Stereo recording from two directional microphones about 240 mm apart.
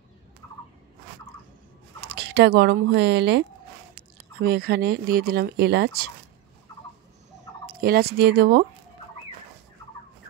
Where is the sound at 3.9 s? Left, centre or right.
Right.